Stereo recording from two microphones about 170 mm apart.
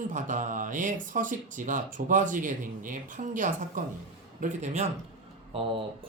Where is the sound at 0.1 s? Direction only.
50° right (ahead or behind).